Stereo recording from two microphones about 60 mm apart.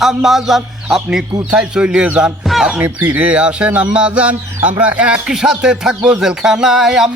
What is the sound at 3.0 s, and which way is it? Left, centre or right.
Speech, right.